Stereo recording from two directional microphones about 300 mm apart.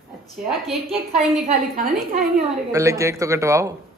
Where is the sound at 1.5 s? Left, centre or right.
Right.